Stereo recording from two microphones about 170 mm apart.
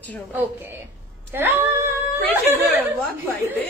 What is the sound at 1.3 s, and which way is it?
A woman's voice, 15° right (ahead or behind).